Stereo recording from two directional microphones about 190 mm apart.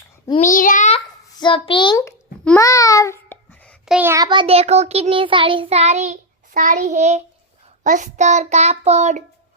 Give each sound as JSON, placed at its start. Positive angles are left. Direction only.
{"t": 0.4, "sound": "a child's voice", "side_deg": 45}
{"t": 1.4, "sound": "a child's voice", "side_deg": 25}
{"t": 2.6, "sound": "child singing", "side_deg": 20}
{"t": 3.9, "sound": "a child's voice", "side_deg": -15}